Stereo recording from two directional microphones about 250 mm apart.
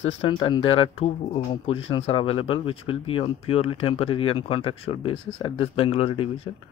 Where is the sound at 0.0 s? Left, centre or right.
Left.